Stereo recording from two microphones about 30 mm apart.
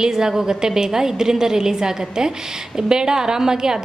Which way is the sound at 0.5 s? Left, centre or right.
Right.